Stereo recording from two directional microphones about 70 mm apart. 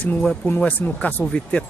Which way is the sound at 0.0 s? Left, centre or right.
Left.